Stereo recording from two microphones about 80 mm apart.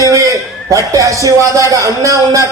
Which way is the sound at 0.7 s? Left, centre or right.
Right.